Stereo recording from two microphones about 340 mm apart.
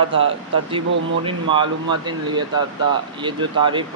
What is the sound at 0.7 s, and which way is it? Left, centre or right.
Speech, centre.